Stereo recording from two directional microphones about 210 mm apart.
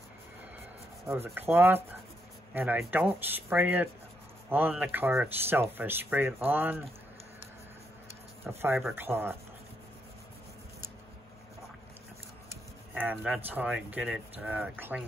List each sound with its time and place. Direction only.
1.0 s speech: 10° right (ahead or behind)
8.5 s speech: 10° right (ahead or behind)
12.4 s speech: 10° right (ahead or behind)